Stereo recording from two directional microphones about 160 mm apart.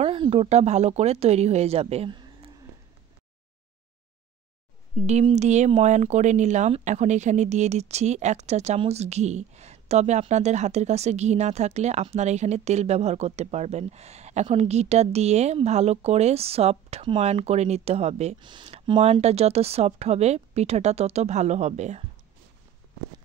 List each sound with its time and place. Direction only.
0.0 s speech: 35° right (ahead or behind)
2.1 s a sound: 30° right (ahead or behind)
4.9 s speech: 45° right (ahead or behind)
18.4 s speech: 30° right (ahead or behind)